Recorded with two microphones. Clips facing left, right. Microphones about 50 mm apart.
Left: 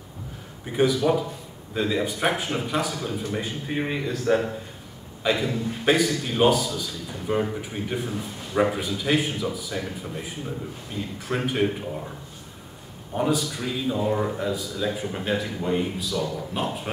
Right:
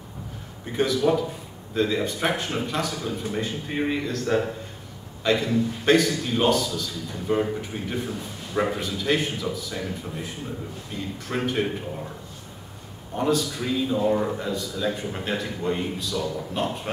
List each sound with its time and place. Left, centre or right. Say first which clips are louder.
0.7 s speech: left 1 dB; centre
13.1 s speech: right 1 dB; centre